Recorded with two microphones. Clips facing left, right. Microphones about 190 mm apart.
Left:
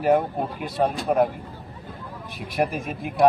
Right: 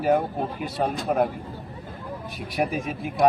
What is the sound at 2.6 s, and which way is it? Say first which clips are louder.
Speech: left 1 dB; centre (ahead or behind).